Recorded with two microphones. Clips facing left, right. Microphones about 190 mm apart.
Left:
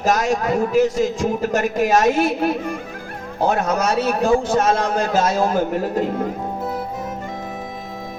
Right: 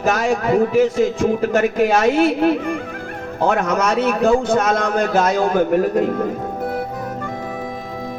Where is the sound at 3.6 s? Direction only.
60° right (ahead or behind).